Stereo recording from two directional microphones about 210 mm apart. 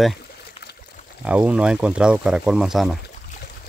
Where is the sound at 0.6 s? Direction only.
30° left (ahead or behind).